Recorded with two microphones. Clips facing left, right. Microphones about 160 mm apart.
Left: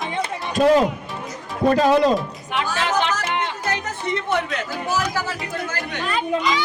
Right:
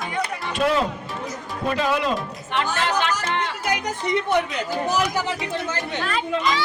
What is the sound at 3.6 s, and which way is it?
Speech, 15° right (ahead or behind).